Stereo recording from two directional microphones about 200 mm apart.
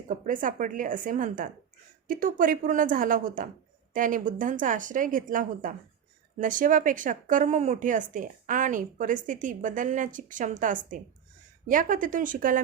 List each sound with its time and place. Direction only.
0.3 s a woman's voice: 40° right (ahead or behind)